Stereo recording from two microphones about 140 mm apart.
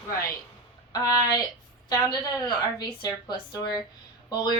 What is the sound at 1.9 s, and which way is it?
A woman's voice, 30° left (ahead or behind).